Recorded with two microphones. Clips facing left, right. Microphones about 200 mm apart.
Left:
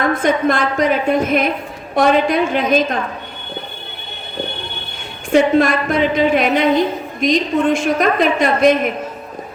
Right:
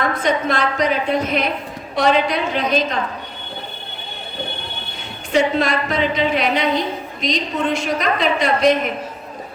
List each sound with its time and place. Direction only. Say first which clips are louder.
0.1 s a woman's voice: left 4 dB; 50° left (ahead or behind)
5.3 s a woman's voice: left 5 dB; 50° left (ahead or behind)